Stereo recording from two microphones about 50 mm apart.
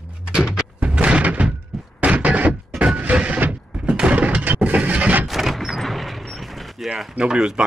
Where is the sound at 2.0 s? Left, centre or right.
Right.